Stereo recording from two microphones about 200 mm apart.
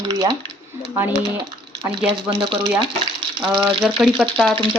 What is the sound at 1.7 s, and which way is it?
Speech, 25° right (ahead or behind).